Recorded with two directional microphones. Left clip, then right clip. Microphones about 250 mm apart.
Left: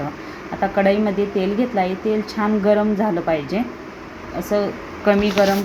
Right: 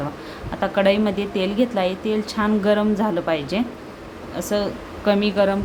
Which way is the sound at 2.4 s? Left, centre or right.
Centre.